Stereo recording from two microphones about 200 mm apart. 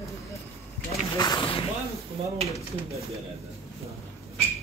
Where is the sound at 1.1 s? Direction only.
20° left (ahead or behind).